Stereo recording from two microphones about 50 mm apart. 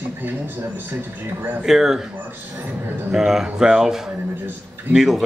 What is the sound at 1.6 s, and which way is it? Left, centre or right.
Speech, centre.